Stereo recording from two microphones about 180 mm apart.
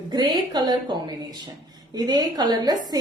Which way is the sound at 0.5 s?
20° right (ahead or behind).